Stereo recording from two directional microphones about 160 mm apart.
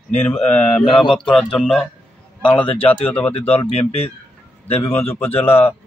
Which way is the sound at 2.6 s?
35° left (ahead or behind).